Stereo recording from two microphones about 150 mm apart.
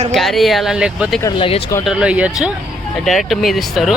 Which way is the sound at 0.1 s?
Centre (ahead or behind).